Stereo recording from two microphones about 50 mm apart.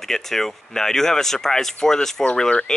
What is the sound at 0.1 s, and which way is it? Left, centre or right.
Speech, centre.